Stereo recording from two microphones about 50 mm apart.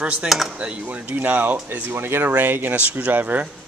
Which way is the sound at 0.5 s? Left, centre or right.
Right.